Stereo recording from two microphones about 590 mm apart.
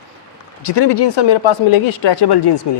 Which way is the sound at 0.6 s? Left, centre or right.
Left.